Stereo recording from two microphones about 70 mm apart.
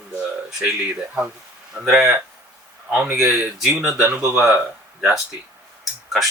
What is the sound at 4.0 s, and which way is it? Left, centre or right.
Speech, right.